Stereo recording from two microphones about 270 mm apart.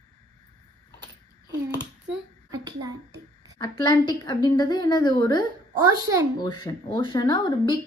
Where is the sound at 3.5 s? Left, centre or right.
Centre.